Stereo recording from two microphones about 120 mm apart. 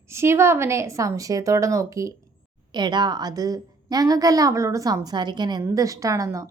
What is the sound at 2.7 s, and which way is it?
A woman's voice, 40° right (ahead or behind).